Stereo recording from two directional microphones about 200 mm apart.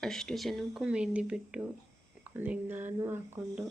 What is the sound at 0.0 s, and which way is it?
Speech, centre (ahead or behind).